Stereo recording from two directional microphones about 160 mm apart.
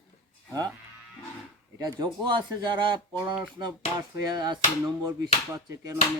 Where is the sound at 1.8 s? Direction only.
25° right (ahead or behind).